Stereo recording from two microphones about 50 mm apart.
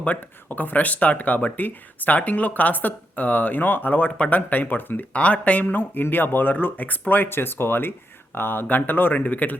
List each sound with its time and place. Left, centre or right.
0.0 s speech: left
5.1 s speech: left
5.6 s speech: left
7.3 s speech: left